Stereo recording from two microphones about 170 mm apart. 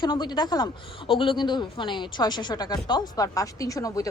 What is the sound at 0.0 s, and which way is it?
Speech, 25° left (ahead or behind).